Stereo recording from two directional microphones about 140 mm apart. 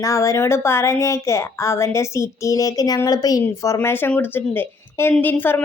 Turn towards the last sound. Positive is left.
turn(degrees=15)  # may be behind; listen again after turning